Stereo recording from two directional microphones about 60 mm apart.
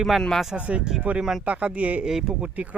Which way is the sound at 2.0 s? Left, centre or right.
Centre.